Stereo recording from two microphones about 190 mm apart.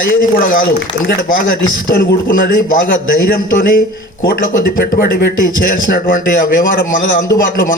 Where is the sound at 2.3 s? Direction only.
45° left (ahead or behind).